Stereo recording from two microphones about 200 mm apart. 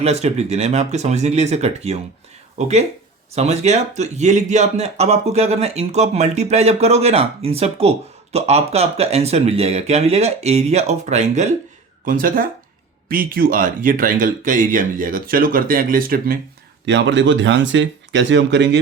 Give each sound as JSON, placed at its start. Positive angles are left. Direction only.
{"t": 0.0, "sound": "a man's voice", "side_deg": -30}
{"t": 16.8, "sound": "speech", "side_deg": -65}